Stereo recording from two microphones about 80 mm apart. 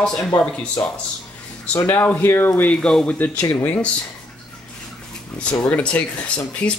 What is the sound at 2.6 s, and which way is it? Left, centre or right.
Speech, centre.